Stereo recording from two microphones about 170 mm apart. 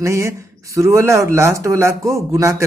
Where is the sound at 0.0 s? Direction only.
15° right (ahead or behind).